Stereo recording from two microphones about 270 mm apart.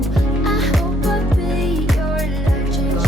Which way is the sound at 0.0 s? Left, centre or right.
Centre.